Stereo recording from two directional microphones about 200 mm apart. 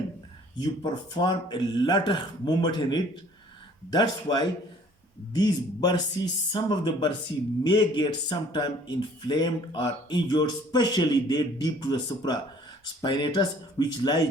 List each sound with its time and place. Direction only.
0.6 s speech: 25° left (ahead or behind)